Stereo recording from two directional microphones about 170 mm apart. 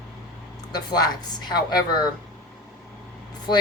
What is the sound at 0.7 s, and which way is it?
Speech, 25° left (ahead or behind).